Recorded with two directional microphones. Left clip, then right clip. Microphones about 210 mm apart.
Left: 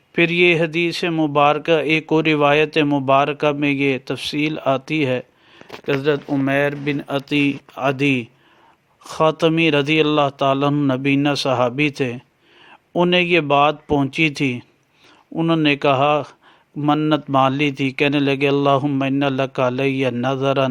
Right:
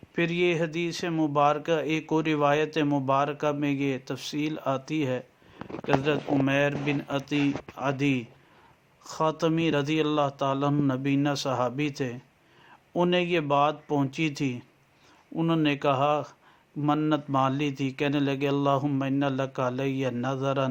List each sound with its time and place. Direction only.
0.1 s speech: 35° left (ahead or behind)